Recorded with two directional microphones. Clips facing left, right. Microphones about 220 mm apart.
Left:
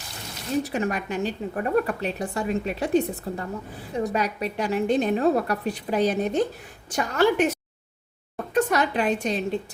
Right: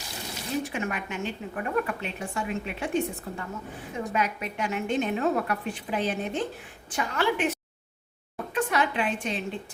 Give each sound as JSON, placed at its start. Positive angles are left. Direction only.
{"t": 0.6, "sound": "speech", "side_deg": 35}
{"t": 8.5, "sound": "a woman's voice", "side_deg": 40}